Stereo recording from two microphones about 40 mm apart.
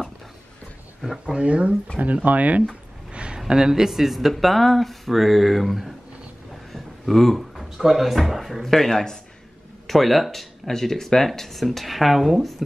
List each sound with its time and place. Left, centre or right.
1.2 s speech: right
3.1 s a sound: right
3.3 s speech: centre